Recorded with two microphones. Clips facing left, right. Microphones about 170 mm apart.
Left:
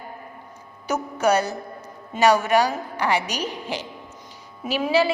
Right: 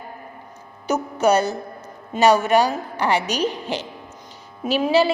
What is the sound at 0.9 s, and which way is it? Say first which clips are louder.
A woman's voice: right 3 dB; 25° right (ahead or behind).